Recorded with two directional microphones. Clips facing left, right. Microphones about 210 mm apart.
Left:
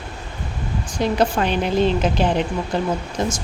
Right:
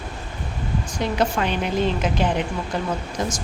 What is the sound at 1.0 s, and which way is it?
Speech, 35° left (ahead or behind).